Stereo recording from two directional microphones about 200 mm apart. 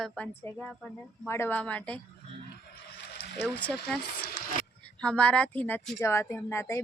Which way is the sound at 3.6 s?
5° left (ahead or behind).